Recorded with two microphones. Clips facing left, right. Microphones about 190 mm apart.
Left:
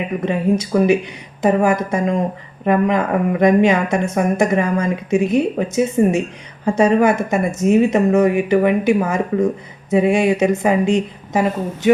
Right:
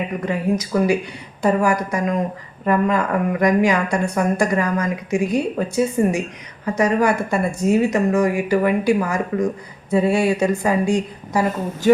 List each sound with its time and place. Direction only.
0.2 s speech: 25° left (ahead or behind)